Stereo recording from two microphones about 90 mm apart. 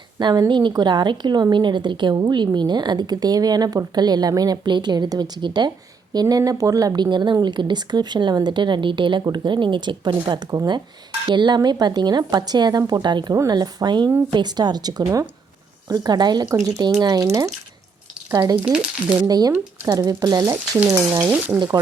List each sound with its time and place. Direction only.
0.2 s a woman's voice: 55° right (ahead or behind)
16.5 s speech: 35° right (ahead or behind)
18.6 s speech: 10° right (ahead or behind)
19.2 s a woman's voice: 45° right (ahead or behind)
21.3 s speech: 20° right (ahead or behind)